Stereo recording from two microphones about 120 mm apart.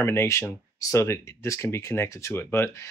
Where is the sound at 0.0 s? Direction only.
20° left (ahead or behind).